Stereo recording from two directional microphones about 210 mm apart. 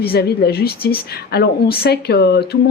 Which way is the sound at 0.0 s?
50° left (ahead or behind).